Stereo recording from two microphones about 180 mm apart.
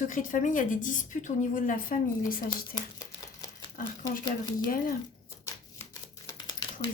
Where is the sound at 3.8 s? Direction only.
50° left (ahead or behind).